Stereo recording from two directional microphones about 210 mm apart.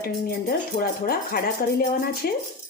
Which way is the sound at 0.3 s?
45° left (ahead or behind).